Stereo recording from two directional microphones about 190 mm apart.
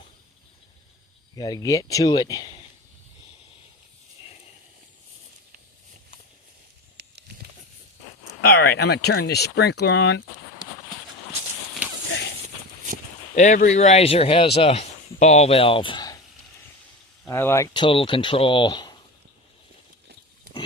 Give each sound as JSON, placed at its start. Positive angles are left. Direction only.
{"t": 1.4, "sound": "speech", "side_deg": 20}
{"t": 7.0, "sound": "a sound", "side_deg": -60}
{"t": 8.4, "sound": "speech", "side_deg": 60}
{"t": 13.3, "sound": "speech", "side_deg": 40}
{"t": 17.2, "sound": "speech", "side_deg": 15}
{"t": 17.7, "sound": "speech", "side_deg": 25}